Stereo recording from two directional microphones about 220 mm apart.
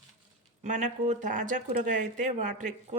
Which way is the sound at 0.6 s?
35° right (ahead or behind).